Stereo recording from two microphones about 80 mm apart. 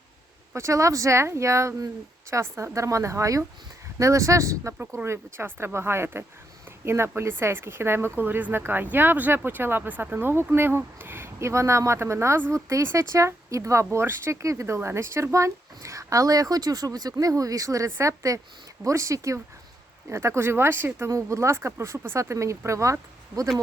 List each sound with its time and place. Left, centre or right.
0.5 s speech: right
21.1 s speech: right